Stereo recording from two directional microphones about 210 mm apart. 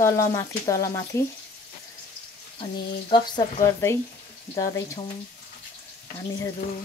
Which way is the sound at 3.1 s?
20° left (ahead or behind).